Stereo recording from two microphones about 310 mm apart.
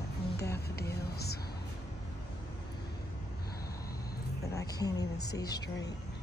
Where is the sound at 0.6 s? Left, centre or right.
Left.